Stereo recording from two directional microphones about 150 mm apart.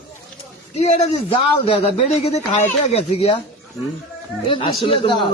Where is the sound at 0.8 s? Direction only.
45° left (ahead or behind).